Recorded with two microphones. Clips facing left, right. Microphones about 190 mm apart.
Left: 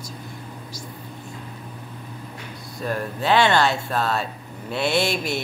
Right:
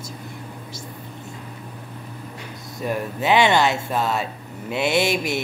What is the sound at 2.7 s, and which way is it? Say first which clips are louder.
Speech: right 1 dB; 15° right (ahead or behind).